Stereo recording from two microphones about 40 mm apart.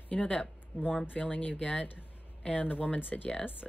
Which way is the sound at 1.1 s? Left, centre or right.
Left.